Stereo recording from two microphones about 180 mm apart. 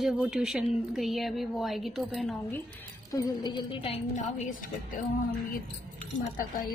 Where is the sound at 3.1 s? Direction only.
25° left (ahead or behind).